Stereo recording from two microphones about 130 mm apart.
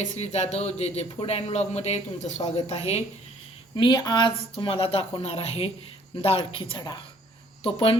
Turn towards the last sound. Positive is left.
turn(degrees=45)  # may be behind; listen again after turning